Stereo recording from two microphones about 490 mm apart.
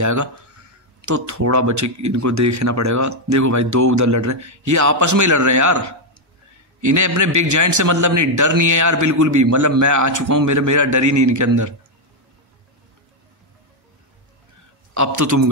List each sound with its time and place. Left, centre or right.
0.0 s speech: right
15.0 s speech: right